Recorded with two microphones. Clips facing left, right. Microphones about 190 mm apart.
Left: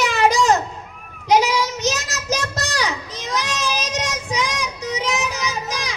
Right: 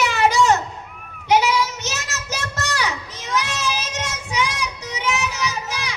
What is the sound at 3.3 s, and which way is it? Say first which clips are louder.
Children playing: even; 35° left (ahead or behind).